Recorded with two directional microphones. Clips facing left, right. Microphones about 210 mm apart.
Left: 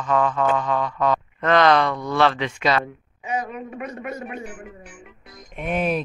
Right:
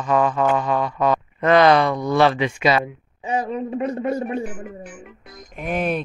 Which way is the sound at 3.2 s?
30° right (ahead or behind).